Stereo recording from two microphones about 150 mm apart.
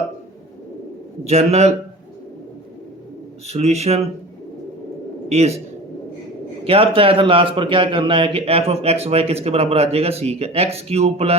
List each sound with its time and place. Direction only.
1.3 s speech: 45° right (ahead or behind)
3.4 s speech: 45° right (ahead or behind)
5.3 s speech: 45° right (ahead or behind)
6.7 s a man's voice: 40° right (ahead or behind)